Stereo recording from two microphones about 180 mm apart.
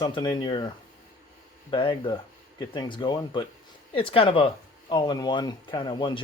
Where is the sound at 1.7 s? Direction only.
30° left (ahead or behind).